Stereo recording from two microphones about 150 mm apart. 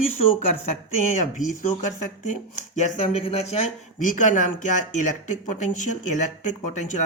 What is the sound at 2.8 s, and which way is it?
Speech, 45° left (ahead or behind).